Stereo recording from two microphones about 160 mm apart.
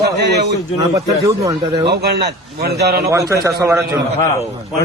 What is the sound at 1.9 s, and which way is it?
A man's voice, 90° right.